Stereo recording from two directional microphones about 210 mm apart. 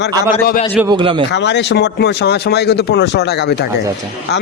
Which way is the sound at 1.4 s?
55° left (ahead or behind).